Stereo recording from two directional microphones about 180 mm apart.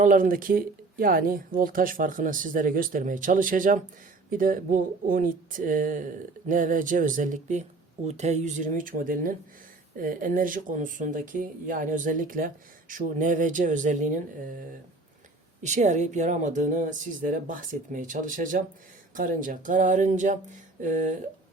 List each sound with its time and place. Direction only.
0.0 s speech: 45° right (ahead or behind)
15.6 s speech: 40° right (ahead or behind)